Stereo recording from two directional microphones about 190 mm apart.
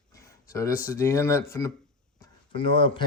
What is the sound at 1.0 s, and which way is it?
Speech, 15° left (ahead or behind).